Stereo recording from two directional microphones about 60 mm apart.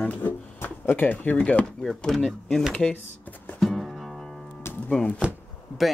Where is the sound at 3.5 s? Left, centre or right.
Centre.